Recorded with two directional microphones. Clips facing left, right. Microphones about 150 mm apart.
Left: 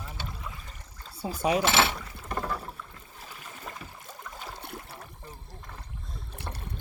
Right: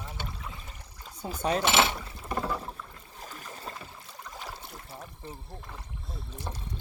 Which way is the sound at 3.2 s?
35° right (ahead or behind).